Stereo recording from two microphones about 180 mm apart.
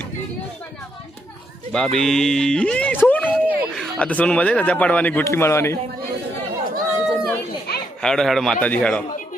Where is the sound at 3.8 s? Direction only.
5° left (ahead or behind).